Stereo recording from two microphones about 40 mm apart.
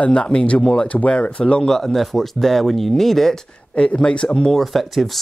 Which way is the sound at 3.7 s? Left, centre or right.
Left.